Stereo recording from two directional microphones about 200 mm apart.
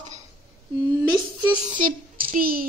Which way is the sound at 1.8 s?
45° right (ahead or behind).